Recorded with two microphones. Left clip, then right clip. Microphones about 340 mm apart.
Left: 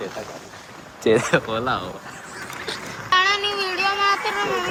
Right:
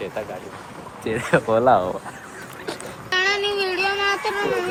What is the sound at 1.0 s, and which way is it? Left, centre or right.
Speech, centre.